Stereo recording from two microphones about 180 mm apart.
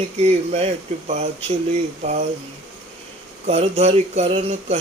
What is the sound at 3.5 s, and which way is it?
Mantra, 35° right (ahead or behind).